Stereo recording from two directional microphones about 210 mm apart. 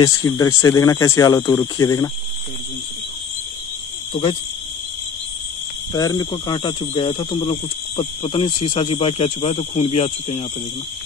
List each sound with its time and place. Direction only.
0.0 s speech: 15° left (ahead or behind)
4.1 s speech: 25° left (ahead or behind)
5.9 s speech: 20° left (ahead or behind)